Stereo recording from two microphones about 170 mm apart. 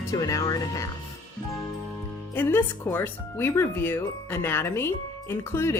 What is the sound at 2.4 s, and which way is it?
Speech, 15° left (ahead or behind).